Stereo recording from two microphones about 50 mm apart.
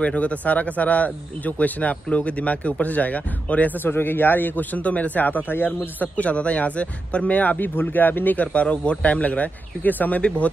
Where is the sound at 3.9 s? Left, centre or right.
Left.